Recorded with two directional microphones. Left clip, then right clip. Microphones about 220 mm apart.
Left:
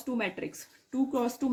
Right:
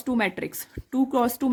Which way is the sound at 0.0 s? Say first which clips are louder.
Right 7 dB; 45° right (ahead or behind).